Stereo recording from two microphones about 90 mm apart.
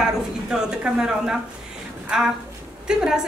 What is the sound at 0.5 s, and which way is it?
A woman's voice, 10° right (ahead or behind).